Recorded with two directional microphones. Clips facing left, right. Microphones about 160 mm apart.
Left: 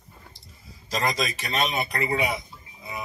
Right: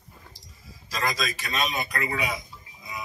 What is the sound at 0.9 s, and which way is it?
A man's voice, 25° left (ahead or behind).